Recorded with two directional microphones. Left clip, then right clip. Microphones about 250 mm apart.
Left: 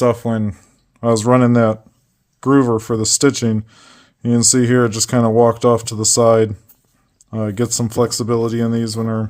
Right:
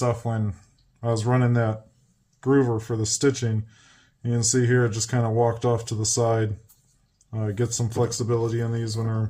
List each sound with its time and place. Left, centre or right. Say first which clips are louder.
0.0 s speech: left 10 dB; left